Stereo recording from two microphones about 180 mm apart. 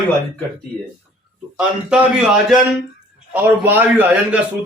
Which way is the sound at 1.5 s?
5° right (ahead or behind).